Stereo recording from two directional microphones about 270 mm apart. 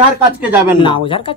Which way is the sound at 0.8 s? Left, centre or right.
Centre.